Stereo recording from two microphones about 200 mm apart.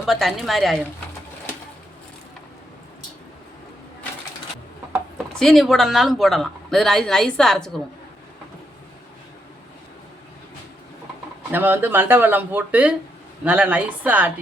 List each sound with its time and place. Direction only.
0.0 s a woman's voice: centre (ahead or behind)
4.9 s speech: centre (ahead or behind)
11.5 s speech: 10° right (ahead or behind)